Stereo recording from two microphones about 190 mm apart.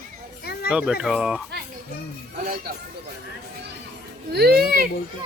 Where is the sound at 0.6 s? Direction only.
5° right (ahead or behind).